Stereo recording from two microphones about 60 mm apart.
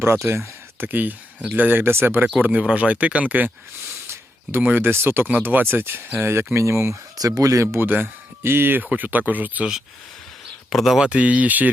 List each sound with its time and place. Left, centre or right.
0.0 s speech: right
2.2 s speech: right
4.0 s a sound: right
4.7 s speech: right
7.2 s speech: right
7.8 s speech: right
10.7 s speech: centre
11.0 s speech: right